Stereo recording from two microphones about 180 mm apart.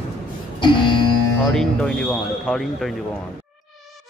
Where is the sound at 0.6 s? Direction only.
25° left (ahead or behind).